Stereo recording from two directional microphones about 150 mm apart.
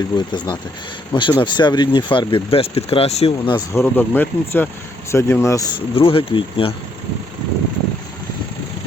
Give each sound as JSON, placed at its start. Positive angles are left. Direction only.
{"t": 0.0, "sound": "speech", "side_deg": 30}
{"t": 3.8, "sound": "speech", "side_deg": 15}
{"t": 5.9, "sound": "speech", "side_deg": 40}